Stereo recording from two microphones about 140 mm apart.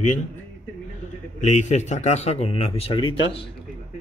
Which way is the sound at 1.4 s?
55° left (ahead or behind).